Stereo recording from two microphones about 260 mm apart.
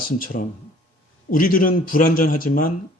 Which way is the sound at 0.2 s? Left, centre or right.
Left.